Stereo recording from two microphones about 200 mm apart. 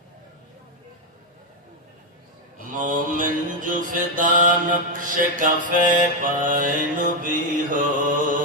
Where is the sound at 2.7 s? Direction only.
40° right (ahead or behind).